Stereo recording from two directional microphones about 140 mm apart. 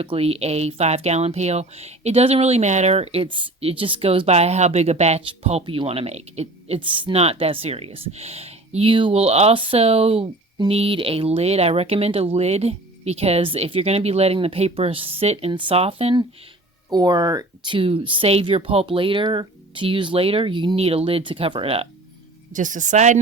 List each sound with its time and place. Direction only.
0.0 s speech: 45° right (ahead or behind)
5.2 s speech: 40° right (ahead or behind)
16.9 s speech: 30° right (ahead or behind)
22.5 s speech: 65° right (ahead or behind)